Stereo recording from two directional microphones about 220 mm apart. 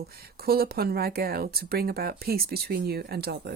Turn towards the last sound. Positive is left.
turn(degrees=-50)  # may be behind; listen again after turning